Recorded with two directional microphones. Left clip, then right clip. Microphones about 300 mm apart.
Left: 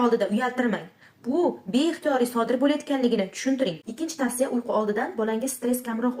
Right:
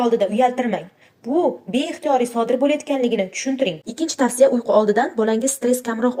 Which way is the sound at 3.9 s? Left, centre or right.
Right.